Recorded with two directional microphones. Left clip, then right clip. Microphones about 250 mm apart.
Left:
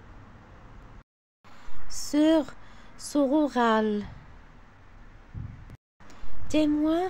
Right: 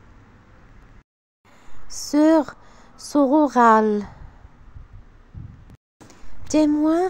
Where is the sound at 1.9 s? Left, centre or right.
Centre.